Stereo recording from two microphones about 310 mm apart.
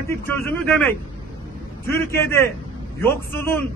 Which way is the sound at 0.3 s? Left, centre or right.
Centre.